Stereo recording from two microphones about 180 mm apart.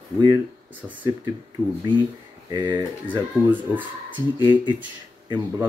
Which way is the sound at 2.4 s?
25° right (ahead or behind).